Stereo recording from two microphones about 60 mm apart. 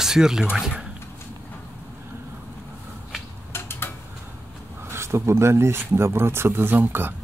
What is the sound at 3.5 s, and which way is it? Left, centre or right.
Tick-tock, left.